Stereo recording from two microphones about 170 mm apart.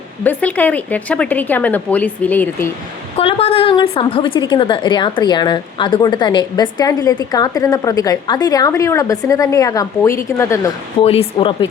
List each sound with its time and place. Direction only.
0.3 s a woman's voice: 10° left (ahead or behind)
3.2 s a woman's voice: 35° left (ahead or behind); by 10.7 s 15° left (ahead or behind)
11.0 s speech: 35° left (ahead or behind)